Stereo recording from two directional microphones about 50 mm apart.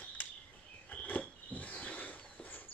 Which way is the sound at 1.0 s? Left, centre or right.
Left.